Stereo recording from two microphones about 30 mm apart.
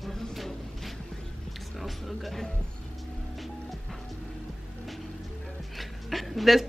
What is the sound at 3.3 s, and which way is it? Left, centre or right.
Vehicle, centre.